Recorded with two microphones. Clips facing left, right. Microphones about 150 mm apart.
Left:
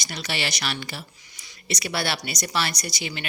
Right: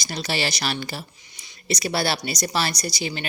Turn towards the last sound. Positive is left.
turn(degrees=-35)  # may be behind; listen again after turning